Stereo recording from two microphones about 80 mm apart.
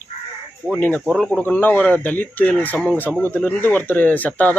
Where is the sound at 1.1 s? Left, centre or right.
Centre.